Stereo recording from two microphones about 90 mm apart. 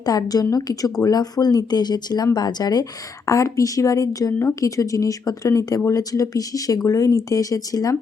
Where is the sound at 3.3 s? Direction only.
35° left (ahead or behind).